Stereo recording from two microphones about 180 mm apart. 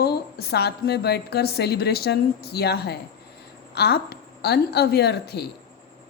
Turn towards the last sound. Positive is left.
turn(degrees=65)  # may be behind; listen again after turning